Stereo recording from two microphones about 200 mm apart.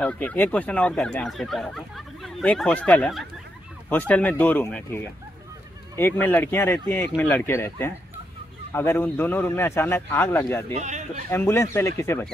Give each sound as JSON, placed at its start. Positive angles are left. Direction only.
{"t": 0.0, "sound": "speech", "side_deg": 10}
{"t": 10.7, "sound": "speech", "side_deg": -35}
{"t": 11.2, "sound": "speech", "side_deg": 10}